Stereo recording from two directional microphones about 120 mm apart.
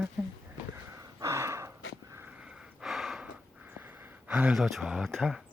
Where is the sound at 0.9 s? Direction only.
25° right (ahead or behind).